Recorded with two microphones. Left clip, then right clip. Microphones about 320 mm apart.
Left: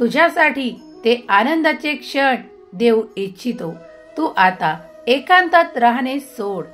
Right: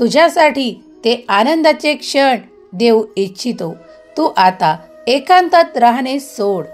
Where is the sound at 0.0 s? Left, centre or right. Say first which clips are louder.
Right 4 dB; right.